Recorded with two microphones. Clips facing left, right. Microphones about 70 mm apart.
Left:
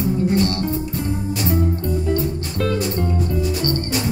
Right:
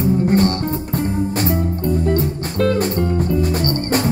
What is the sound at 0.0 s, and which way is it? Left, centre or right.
Music, right.